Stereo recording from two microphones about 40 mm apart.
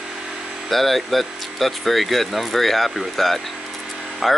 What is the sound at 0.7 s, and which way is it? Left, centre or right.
Speech, centre.